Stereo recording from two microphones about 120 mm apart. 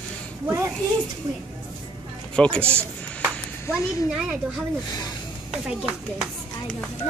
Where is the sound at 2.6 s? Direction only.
20° right (ahead or behind).